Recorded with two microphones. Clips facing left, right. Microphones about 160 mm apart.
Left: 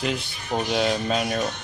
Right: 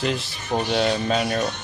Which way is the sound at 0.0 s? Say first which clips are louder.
Right 2 dB; centre (ahead or behind).